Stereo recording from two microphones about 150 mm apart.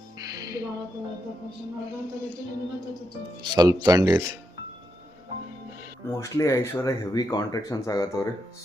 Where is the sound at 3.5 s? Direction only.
25° right (ahead or behind).